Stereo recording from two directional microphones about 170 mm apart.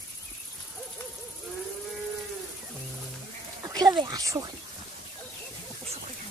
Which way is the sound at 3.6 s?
20° right (ahead or behind).